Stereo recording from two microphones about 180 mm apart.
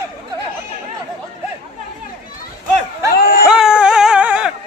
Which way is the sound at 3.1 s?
55° left (ahead or behind).